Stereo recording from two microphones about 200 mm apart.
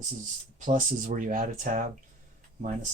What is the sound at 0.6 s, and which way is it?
Speech, 40° right (ahead or behind).